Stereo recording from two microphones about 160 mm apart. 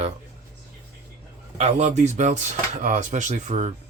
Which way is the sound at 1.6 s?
45° right (ahead or behind).